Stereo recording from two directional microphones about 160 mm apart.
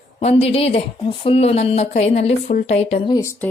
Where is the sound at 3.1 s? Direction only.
20° left (ahead or behind).